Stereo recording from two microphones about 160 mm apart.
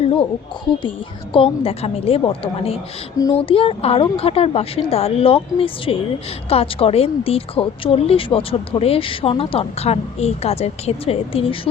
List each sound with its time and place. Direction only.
0.8 s speech: 30° left (ahead or behind)